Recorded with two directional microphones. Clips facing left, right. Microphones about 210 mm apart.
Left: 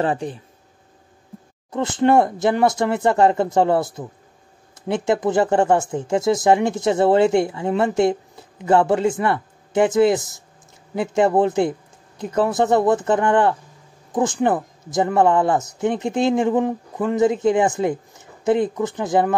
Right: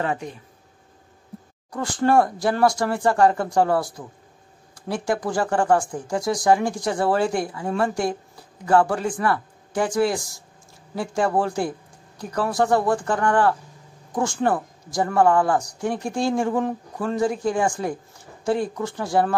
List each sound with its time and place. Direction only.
0.0 s speech: 30° left (ahead or behind)
1.7 s speech: 20° left (ahead or behind)